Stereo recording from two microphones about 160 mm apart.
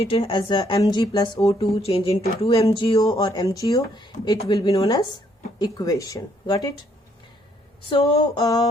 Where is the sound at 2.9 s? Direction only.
20° left (ahead or behind).